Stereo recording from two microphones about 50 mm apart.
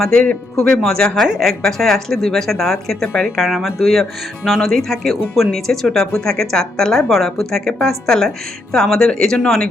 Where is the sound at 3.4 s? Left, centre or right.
Centre.